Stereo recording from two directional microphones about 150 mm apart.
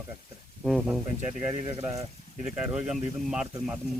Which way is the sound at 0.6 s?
Centre (ahead or behind).